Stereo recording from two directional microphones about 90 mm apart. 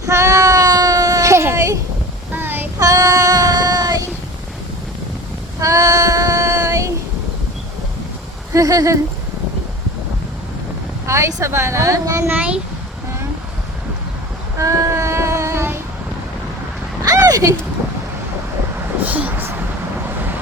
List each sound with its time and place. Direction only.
0.0 s a sound: 35° right (ahead or behind)
2.3 s child singing: 25° right (ahead or behind)
2.7 s child singing: 40° right (ahead or behind)
5.5 s child singing: 40° right (ahead or behind)
8.5 s speech: 40° right (ahead or behind)
11.0 s speech: 30° right (ahead or behind)
12.3 s speech: 15° right (ahead or behind)
14.6 s child singing: 35° right (ahead or behind)
17.1 s a sound: 40° right (ahead or behind)
19.0 s speech: 15° right (ahead or behind)